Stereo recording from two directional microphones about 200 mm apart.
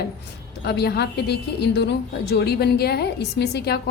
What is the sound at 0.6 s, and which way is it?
A woman's voice, 55° left (ahead or behind).